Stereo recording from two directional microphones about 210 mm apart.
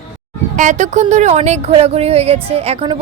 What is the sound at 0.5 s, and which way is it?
Speech, 35° right (ahead or behind).